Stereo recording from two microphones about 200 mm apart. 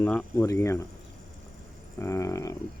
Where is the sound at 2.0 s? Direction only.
15° left (ahead or behind).